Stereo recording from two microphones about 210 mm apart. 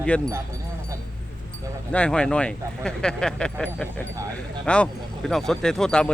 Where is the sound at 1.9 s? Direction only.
5° left (ahead or behind).